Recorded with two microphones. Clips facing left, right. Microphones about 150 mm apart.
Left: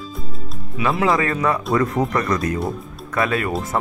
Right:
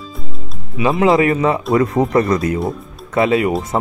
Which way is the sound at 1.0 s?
20° right (ahead or behind).